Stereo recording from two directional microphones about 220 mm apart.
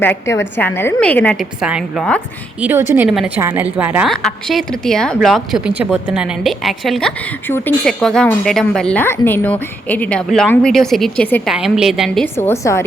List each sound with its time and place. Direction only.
0.3 s a woman's voice: 10° left (ahead or behind)